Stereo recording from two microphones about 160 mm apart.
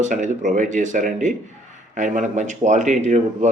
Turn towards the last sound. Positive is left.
turn(degrees=-45)  # may be behind; listen again after turning